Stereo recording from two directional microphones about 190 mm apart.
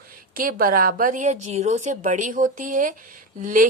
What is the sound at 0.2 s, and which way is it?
A woman's voice, 50° right (ahead or behind).